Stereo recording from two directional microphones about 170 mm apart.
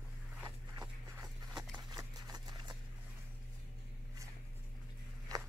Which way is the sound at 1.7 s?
25° right (ahead or behind).